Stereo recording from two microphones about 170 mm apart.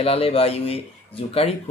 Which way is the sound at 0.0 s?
35° left (ahead or behind).